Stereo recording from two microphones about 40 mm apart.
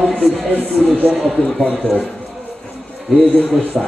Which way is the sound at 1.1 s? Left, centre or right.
Centre.